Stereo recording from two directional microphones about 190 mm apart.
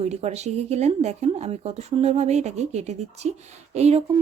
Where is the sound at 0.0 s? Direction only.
35° right (ahead or behind).